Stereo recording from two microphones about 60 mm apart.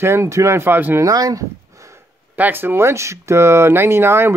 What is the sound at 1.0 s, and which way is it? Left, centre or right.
Speech, right.